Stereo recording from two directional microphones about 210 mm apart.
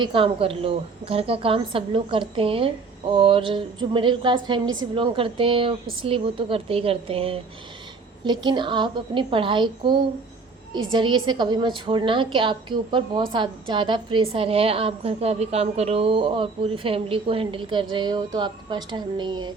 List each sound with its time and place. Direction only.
0.0 s a woman's voice: 25° right (ahead or behind)